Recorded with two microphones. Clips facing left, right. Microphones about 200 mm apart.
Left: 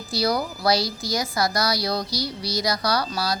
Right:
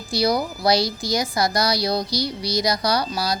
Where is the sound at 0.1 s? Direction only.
15° right (ahead or behind).